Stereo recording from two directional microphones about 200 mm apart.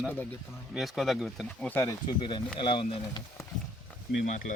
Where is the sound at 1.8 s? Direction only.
20° left (ahead or behind).